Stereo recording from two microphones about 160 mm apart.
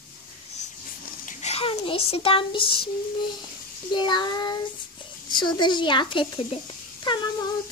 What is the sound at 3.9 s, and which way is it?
A child's voice, 30° left (ahead or behind).